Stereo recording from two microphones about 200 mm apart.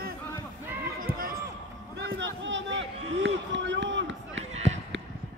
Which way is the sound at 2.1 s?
65° right (ahead or behind).